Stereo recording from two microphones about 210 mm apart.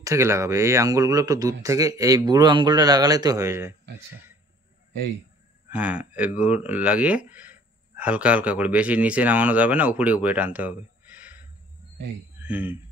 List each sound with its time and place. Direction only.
0.0 s speech: 15° right (ahead or behind)
5.7 s speech: 5° right (ahead or behind)
12.4 s speech: 10° right (ahead or behind)